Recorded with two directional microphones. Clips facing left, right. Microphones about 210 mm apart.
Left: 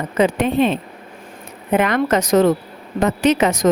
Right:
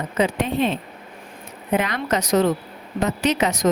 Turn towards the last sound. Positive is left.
turn(degrees=50)  # may be behind; listen again after turning